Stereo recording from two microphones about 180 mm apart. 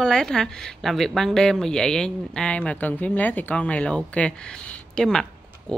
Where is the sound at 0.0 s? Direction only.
5° left (ahead or behind).